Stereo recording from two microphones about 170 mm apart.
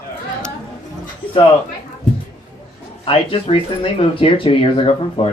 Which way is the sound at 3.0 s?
35° left (ahead or behind).